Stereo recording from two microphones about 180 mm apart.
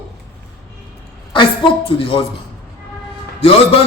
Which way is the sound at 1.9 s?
30° left (ahead or behind).